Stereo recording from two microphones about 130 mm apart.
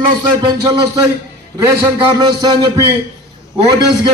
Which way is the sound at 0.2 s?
30° right (ahead or behind).